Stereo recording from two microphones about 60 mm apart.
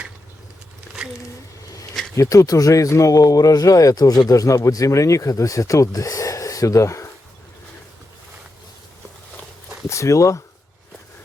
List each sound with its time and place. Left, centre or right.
2.1 s speech: left
9.9 s speech: left